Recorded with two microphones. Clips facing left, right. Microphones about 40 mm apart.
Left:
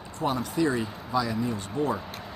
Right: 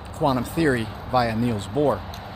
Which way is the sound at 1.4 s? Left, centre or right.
Right.